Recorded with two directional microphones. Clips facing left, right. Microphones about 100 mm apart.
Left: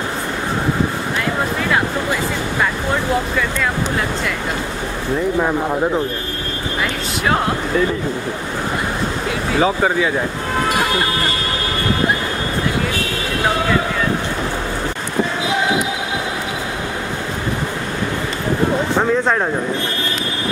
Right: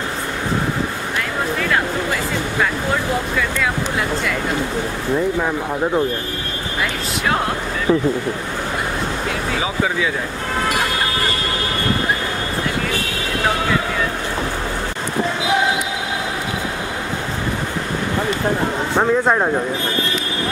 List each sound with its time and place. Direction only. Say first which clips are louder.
18.9 s speech: right 3 dB; 10° right (ahead or behind)